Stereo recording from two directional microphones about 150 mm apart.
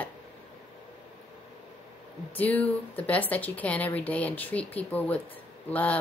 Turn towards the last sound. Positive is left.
turn(degrees=10)  # may be behind; listen again after turning